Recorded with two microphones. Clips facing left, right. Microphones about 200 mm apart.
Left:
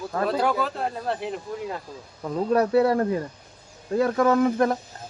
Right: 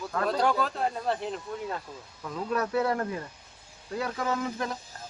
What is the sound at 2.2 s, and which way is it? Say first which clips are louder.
Speech: left 8 dB; 35° left (ahead or behind).